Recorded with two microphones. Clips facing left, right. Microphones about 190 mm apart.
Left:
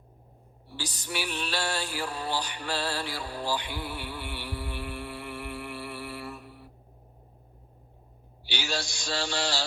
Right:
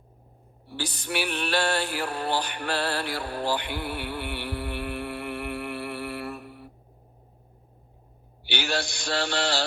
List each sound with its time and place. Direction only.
0.7 s music: 60° right (ahead or behind)
8.4 s mantra: 60° right (ahead or behind)